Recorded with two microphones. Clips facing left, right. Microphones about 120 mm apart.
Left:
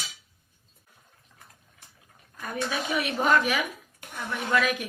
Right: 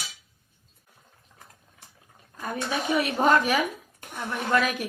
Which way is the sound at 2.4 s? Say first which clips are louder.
Right 1 dB; 30° right (ahead or behind).